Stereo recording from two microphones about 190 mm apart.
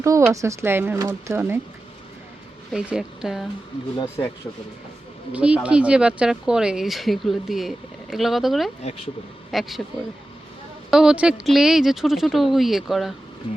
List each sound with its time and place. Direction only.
0.0 s speech: 15° right (ahead or behind)
2.7 s speech: 5° right (ahead or behind)
3.9 s speech: 20° left (ahead or behind)
5.3 s speech: 5° right (ahead or behind)
10.9 s speech: 5° right (ahead or behind)